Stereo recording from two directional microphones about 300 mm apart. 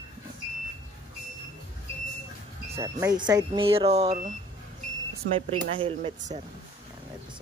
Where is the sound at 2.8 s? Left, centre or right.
Centre.